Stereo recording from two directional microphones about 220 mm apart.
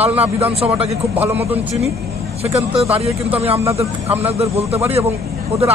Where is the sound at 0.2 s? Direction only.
25° right (ahead or behind).